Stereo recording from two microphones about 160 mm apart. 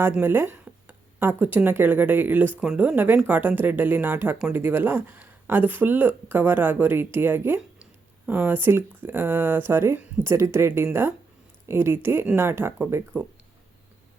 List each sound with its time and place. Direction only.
0.0 s speech: 15° right (ahead or behind)